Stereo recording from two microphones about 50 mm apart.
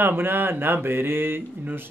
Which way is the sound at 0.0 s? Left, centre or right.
Right.